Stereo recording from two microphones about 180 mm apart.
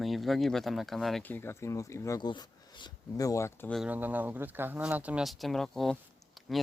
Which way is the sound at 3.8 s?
10° right (ahead or behind).